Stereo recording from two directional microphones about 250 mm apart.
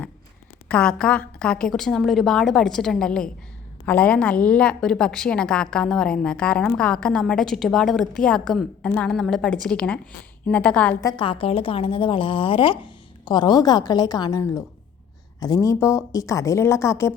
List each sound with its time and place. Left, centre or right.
0.7 s a woman's voice: centre
11.2 s a woman's voice: left